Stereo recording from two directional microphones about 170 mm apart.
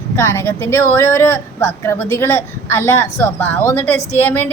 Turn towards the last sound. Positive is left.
turn(degrees=10)  # may be behind; listen again after turning